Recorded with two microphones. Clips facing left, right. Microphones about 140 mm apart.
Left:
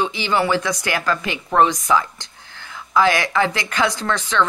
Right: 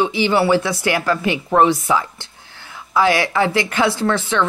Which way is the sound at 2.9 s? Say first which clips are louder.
Right 1 dB; 10° right (ahead or behind).